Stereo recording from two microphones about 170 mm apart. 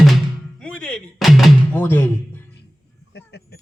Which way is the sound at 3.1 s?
85° left.